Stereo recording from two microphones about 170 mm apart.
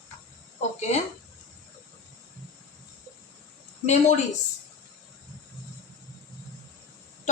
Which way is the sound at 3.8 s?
40° left (ahead or behind).